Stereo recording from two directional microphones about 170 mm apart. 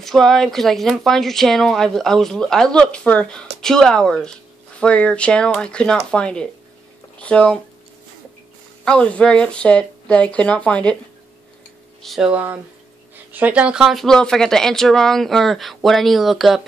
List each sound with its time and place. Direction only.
0.0 s a woman's voice: centre (ahead or behind)
8.8 s speech: 5° left (ahead or behind)
12.0 s a woman's voice: centre (ahead or behind)